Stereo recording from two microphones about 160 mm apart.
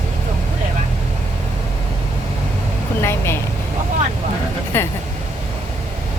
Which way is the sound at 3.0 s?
15° left (ahead or behind).